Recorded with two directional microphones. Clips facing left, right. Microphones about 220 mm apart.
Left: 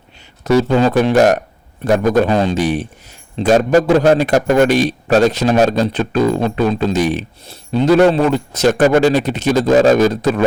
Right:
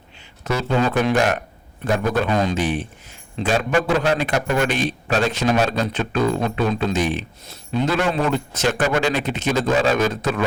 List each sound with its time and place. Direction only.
0.4 s a man's voice: 40° left (ahead or behind)